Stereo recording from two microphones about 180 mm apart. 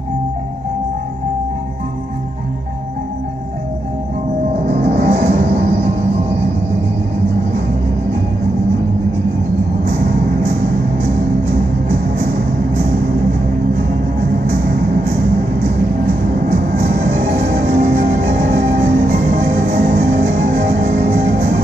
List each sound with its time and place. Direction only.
4.6 s music: 40° right (ahead or behind)
16.4 s music: 45° right (ahead or behind)